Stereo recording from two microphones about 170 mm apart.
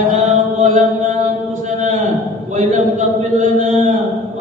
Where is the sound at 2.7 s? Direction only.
45° right (ahead or behind).